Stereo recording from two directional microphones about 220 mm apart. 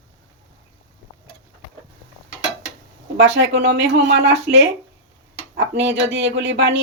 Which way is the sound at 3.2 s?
55° right (ahead or behind).